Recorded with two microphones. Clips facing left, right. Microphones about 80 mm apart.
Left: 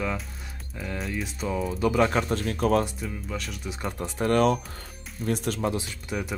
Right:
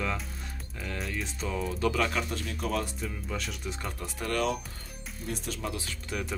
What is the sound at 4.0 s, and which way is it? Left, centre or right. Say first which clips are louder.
Speech: left 8 dB; left.